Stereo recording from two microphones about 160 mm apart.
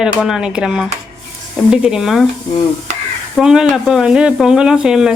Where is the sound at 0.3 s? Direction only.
5° right (ahead or behind).